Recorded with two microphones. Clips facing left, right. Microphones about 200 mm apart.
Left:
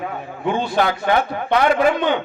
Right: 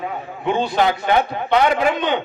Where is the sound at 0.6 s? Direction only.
20° right (ahead or behind).